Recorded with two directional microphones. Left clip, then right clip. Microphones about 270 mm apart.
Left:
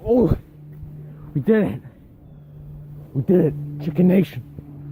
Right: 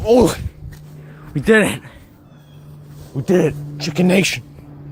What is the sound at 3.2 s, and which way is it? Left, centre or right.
Speech, centre.